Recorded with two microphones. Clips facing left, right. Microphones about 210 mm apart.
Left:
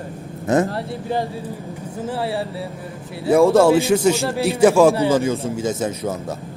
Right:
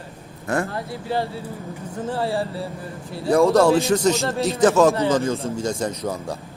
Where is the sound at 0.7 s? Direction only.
30° left (ahead or behind).